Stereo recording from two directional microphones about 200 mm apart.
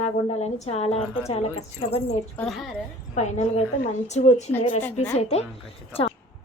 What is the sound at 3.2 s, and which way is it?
Speech, 35° left (ahead or behind).